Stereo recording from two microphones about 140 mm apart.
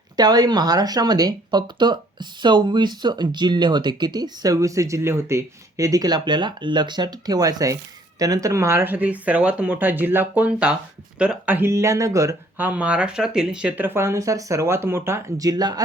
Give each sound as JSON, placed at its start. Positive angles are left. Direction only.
{"t": 0.2, "sound": "speech", "side_deg": -30}